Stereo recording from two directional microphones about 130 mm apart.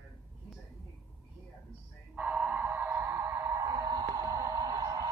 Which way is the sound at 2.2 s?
10° right (ahead or behind).